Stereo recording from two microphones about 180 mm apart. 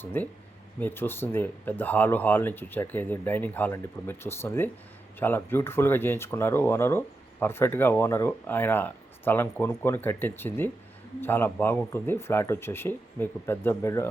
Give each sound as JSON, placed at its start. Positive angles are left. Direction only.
{"t": 0.0, "sound": "speech", "side_deg": 10}